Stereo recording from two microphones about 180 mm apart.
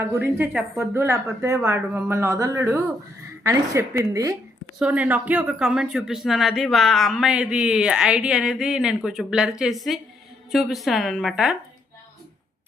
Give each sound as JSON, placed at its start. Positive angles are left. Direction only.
{"t": 0.0, "sound": "speech", "side_deg": -10}